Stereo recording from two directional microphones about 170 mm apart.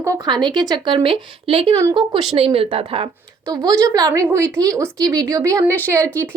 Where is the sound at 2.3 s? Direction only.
35° right (ahead or behind).